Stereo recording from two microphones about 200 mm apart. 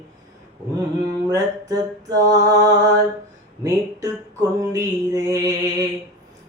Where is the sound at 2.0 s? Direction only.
20° right (ahead or behind).